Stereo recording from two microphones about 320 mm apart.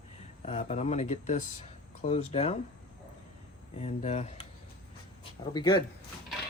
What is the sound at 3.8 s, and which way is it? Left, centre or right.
Speech, centre.